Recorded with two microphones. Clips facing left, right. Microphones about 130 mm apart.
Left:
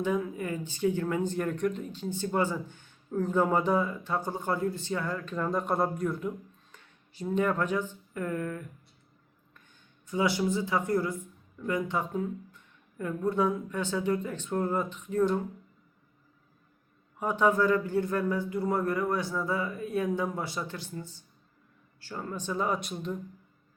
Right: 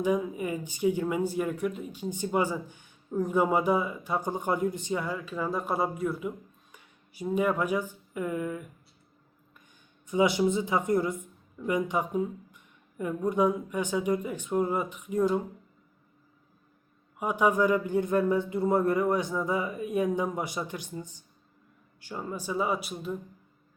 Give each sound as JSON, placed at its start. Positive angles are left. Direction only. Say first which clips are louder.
{"t": 0.0, "sound": "speech", "louder": "right 2 dB", "side_deg": -15}
{"t": 10.1, "sound": "speech", "louder": "right 3 dB", "side_deg": -20}
{"t": 17.2, "sound": "speech", "louder": "right 1 dB", "side_deg": -10}